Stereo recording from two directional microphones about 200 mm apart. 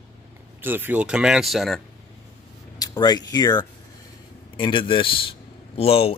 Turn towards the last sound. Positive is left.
turn(degrees=30)  # may be behind; listen again after turning